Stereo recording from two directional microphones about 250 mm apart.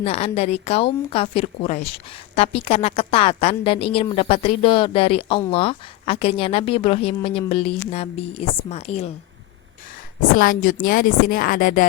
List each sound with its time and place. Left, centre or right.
0.0 s a woman's voice: left
10.3 s a woman's voice: left